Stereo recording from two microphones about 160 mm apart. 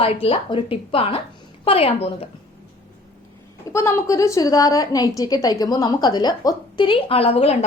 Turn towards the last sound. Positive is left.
turn(degrees=40)  # may be behind; listen again after turning